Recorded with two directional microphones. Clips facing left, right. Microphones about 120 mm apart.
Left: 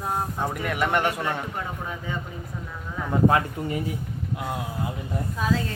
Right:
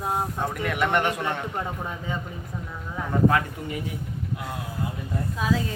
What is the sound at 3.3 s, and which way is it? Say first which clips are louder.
Speech: left 2 dB; 25° left (ahead or behind).